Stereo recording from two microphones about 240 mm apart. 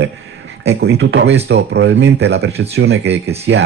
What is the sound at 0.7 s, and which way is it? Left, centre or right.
Speech, right.